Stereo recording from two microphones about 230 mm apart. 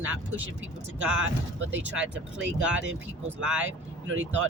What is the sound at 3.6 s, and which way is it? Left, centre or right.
Speech, right.